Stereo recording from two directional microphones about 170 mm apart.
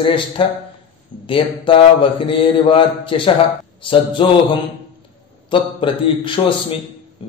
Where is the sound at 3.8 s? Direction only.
30° left (ahead or behind).